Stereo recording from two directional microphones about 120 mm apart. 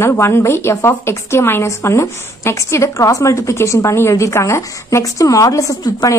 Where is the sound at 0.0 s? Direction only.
20° left (ahead or behind).